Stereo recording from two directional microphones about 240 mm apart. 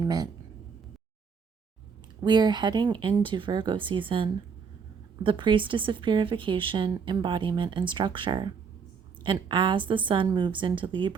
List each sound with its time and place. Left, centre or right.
0.0 s speech: centre
2.2 s speech: centre